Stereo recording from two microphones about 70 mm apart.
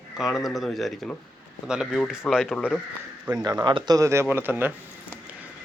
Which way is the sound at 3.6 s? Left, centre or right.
Right.